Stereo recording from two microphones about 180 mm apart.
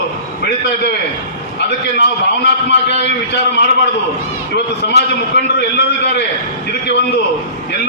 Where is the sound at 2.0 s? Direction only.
70° left (ahead or behind).